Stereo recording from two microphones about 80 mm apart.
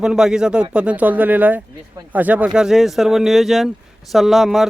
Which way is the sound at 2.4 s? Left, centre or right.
Centre.